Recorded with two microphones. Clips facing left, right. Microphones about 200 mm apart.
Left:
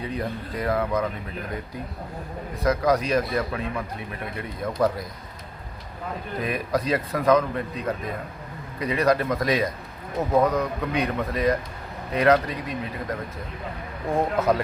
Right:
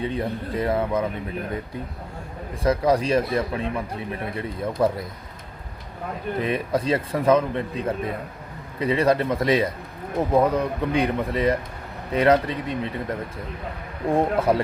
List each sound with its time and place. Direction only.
0.0 s speech: 25° right (ahead or behind)
2.6 s speech: 30° right (ahead or behind)
6.4 s speech: 25° right (ahead or behind)
14.3 s speech: 30° right (ahead or behind)